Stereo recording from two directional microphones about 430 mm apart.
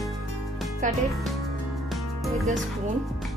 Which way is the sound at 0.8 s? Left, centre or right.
Centre.